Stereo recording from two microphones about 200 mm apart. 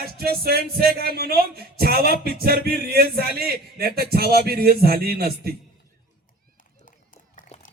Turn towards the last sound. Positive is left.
turn(degrees=40)  # may be behind; listen again after turning